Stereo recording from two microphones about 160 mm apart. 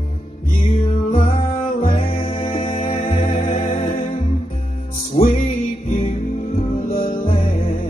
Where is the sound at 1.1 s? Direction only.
35° left (ahead or behind).